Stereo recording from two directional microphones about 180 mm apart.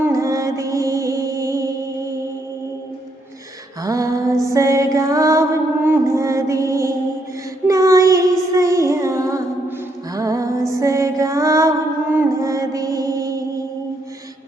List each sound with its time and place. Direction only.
0.0 s music: 15° right (ahead or behind)
3.8 s music: 20° right (ahead or behind)
7.7 s child singing: 15° right (ahead or behind)
10.2 s music: 20° right (ahead or behind)
12.1 s mantra: 15° right (ahead or behind)